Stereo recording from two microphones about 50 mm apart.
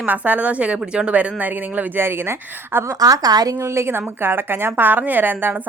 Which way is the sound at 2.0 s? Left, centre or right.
Right.